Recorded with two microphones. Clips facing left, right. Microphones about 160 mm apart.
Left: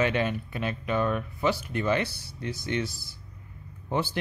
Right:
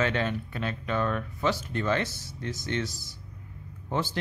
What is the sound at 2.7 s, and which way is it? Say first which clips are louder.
A man's voice: left 2 dB; 15° left (ahead or behind).